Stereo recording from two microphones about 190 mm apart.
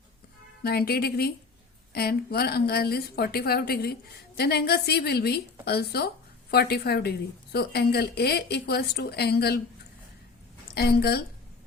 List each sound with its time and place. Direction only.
0.6 s a woman's voice: 55° left (ahead or behind)
10.8 s a woman's voice: 55° left (ahead or behind)